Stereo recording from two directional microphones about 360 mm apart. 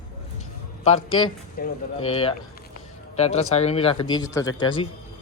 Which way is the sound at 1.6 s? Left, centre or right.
Left.